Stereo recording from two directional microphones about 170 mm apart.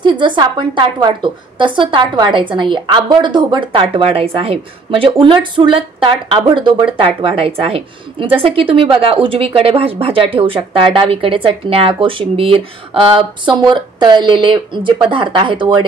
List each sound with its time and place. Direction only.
0.0 s a woman's voice: 25° right (ahead or behind)